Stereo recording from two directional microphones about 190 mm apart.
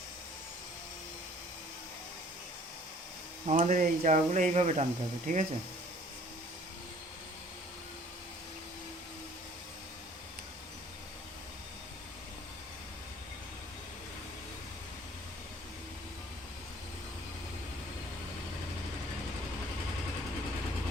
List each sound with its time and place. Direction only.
3.4 s speech: 40° right (ahead or behind)